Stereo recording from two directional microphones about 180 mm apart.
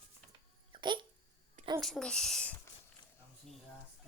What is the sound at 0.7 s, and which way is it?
Dog, 25° right (ahead or behind).